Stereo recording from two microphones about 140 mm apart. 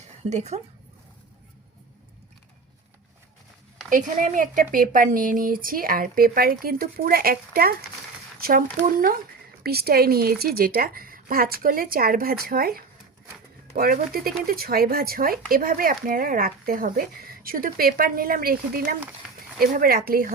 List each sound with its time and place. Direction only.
0.3 s speech: 55° right (ahead or behind)
3.8 s speech: 65° right (ahead or behind); by 7.7 s 90° right
8.4 s a sound: 90° right
8.8 s speech: 90° right